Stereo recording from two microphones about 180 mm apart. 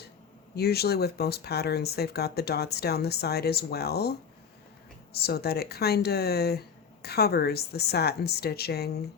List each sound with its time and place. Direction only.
0.5 s speech: 60° left (ahead or behind)
5.1 s speech: 60° left (ahead or behind)